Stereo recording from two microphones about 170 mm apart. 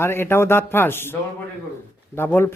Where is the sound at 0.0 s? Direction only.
15° left (ahead or behind).